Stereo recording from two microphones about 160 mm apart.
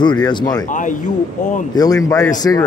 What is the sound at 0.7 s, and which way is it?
Speech, 50° left (ahead or behind).